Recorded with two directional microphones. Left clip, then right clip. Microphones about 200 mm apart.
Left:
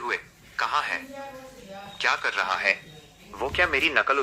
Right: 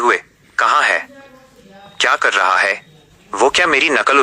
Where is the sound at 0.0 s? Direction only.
50° right (ahead or behind).